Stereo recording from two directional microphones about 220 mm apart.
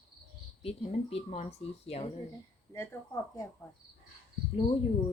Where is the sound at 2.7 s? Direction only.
15° left (ahead or behind).